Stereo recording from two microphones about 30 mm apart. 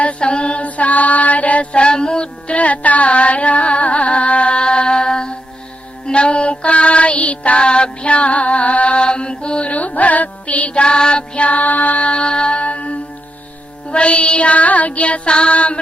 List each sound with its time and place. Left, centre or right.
0.0 s mantra: left
0.6 s mantra: left
1.7 s female singing: left
2.5 s carnatic music: left
6.1 s music: left
7.6 s music: left
9.0 s mantra: left
9.6 s music: left
10.8 s music: left
11.4 s music: left
13.9 s child singing: left
15.3 s music: left